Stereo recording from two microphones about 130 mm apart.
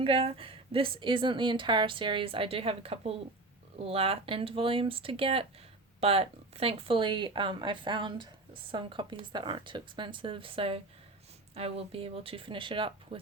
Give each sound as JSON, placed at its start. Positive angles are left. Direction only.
{"t": 0.0, "sound": "a woman's voice", "side_deg": -45}